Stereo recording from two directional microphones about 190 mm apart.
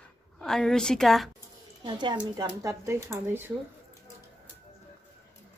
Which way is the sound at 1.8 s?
25° right (ahead or behind).